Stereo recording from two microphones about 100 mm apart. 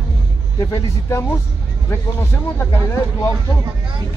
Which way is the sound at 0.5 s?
30° left (ahead or behind).